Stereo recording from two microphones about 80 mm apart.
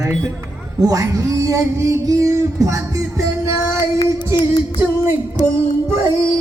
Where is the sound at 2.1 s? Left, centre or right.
Right.